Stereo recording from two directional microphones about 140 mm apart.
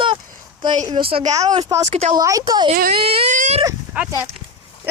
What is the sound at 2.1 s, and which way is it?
Speech, 25° right (ahead or behind).